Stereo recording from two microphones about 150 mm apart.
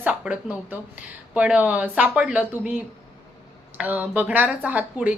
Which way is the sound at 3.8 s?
10° right (ahead or behind).